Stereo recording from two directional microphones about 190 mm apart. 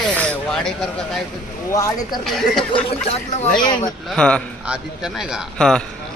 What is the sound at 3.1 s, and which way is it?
Speech, 35° left (ahead or behind).